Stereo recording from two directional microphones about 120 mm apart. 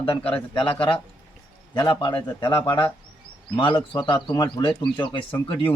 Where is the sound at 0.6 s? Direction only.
45° left (ahead or behind).